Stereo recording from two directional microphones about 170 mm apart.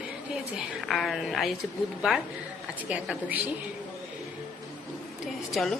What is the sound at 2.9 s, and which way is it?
Speech, 10° right (ahead or behind).